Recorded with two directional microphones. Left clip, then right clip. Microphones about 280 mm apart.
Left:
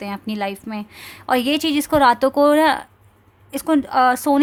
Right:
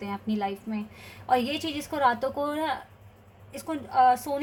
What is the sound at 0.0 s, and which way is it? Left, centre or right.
Speech, left.